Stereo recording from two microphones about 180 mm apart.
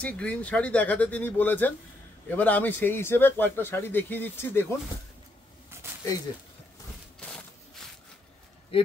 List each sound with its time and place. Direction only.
0.0 s speech: 5° left (ahead or behind)
7.2 s a sound: 5° left (ahead or behind)
8.7 s speech: 30° left (ahead or behind)